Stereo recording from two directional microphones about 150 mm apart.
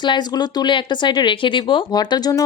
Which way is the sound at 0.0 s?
30° left (ahead or behind).